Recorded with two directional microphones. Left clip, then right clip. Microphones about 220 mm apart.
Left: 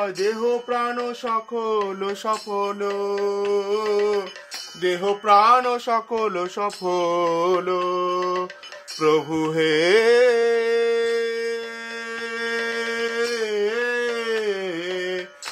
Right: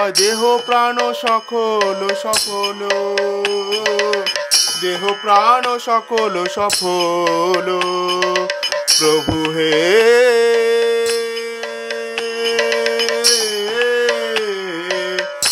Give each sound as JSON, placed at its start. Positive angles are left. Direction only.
{"t": 0.1, "sound": "music", "side_deg": -45}
{"t": 2.9, "sound": "music", "side_deg": -45}
{"t": 5.3, "sound": "music", "side_deg": -10}
{"t": 8.1, "sound": "music", "side_deg": -45}
{"t": 9.6, "sound": "a sound", "side_deg": -10}